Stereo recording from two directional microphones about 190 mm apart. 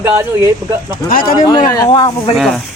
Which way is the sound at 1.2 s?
25° left (ahead or behind).